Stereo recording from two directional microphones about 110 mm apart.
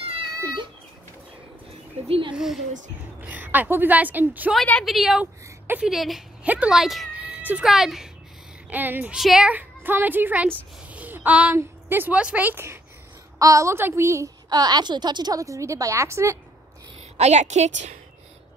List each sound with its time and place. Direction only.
2.0 s speech: 55° right (ahead or behind)
2.3 s speech: 5° right (ahead or behind)
3.2 s speech: 15° right (ahead or behind)
4.8 s speech: 5° right (ahead or behind)
5.2 s a woman's voice: 15° right (ahead or behind)
5.9 s speech: centre (ahead or behind)
6.4 s speech: 10° right (ahead or behind)
7.2 s speech: 15° right (ahead or behind)
8.6 s speech: 15° right (ahead or behind)
9.1 s speech: 5° right (ahead or behind)
9.5 s speech: 15° right (ahead or behind)
10.9 s a sound: 15° right (ahead or behind)
11.5 s a woman's voice: 20° right (ahead or behind)
17.2 s a woman's voice: 90° right